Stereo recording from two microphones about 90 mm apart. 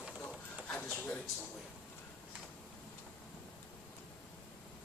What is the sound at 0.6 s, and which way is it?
Speech, 20° left (ahead or behind).